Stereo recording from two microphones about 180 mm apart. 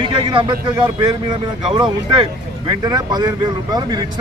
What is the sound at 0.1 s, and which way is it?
Speech, 25° right (ahead or behind).